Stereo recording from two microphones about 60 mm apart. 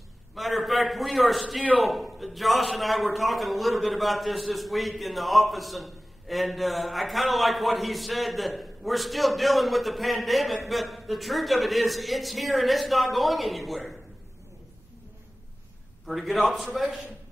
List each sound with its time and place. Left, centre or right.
0.3 s a man's voice: centre
16.1 s a man's voice: centre